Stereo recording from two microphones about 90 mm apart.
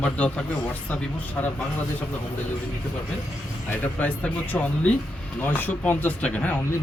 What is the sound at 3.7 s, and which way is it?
Speech, 20° left (ahead or behind).